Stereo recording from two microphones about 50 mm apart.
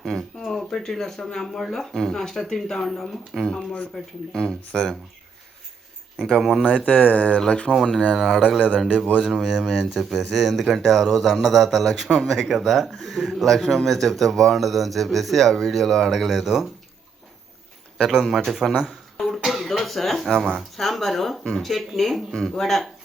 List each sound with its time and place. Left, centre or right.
0.0 s speech: centre
6.1 s speech: centre
7.0 s speech: left
7.3 s speech: centre
8.1 s speech: centre
18.1 s speech: centre
19.1 s a sound: centre
19.5 s cough: centre
20.7 s speech: centre